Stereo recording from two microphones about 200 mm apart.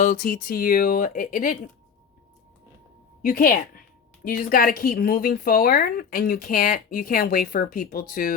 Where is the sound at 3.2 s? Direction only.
45° left (ahead or behind).